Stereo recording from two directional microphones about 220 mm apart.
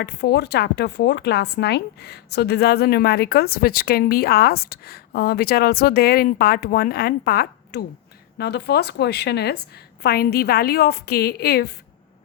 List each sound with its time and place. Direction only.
0.0 s a woman's voice: 45° left (ahead or behind)